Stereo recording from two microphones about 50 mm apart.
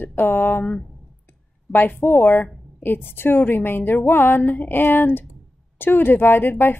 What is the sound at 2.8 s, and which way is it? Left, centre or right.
A woman's voice, left.